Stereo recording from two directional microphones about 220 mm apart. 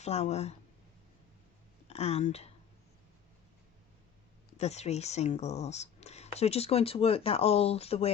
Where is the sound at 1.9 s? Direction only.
30° left (ahead or behind).